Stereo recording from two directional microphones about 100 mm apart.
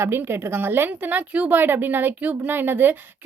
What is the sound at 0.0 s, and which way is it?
A woman's voice, 25° right (ahead or behind).